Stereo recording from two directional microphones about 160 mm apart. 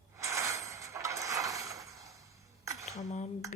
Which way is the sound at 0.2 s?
20° right (ahead or behind).